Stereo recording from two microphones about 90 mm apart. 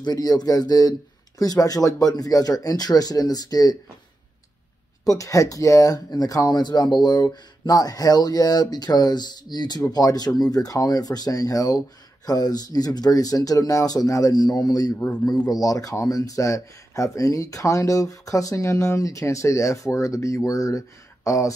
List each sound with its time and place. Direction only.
0.0 s speech: 45° left (ahead or behind)
5.0 s speech: 40° left (ahead or behind)